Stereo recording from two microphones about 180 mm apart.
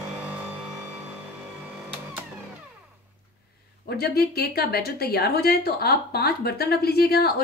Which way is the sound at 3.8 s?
60° left (ahead or behind).